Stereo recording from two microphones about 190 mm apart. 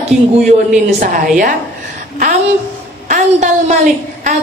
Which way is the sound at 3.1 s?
40° right (ahead or behind).